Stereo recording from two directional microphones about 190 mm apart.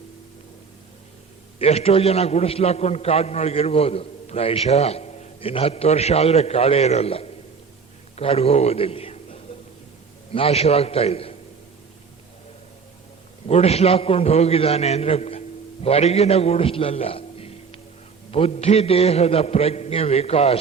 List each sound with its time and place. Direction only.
1.5 s a man's voice: 30° left (ahead or behind)
13.5 s a man's voice: 35° left (ahead or behind)